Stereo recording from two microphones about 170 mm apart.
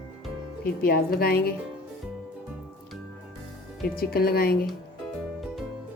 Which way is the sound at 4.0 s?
60° left (ahead or behind).